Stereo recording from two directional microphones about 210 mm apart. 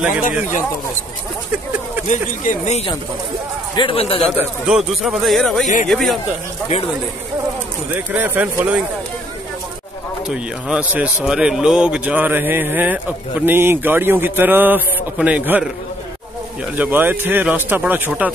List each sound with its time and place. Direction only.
2.0 s a man's voice: 35° left (ahead or behind)
4.3 s a man's voice: 5° right (ahead or behind)
6.7 s speech: 35° left (ahead or behind)
7.9 s a man's voice: 10° right (ahead or behind)
10.2 s a man's voice: 5° right (ahead or behind)
16.7 s a man's voice: 10° right (ahead or behind)